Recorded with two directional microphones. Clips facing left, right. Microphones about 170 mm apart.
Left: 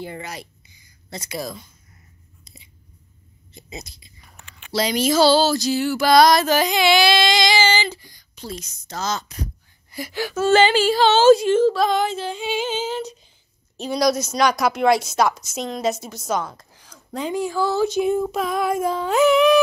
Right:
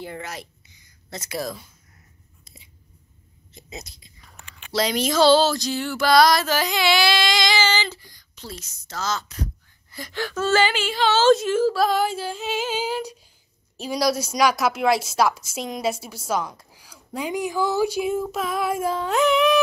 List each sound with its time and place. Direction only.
0.0 s speech: centre (ahead or behind)
3.5 s speech: centre (ahead or behind)
6.1 s a sound: 20° left (ahead or behind)
9.8 s speech: 10° left (ahead or behind)
10.7 s speech: 35° left (ahead or behind)
11.2 s speech: centre (ahead or behind)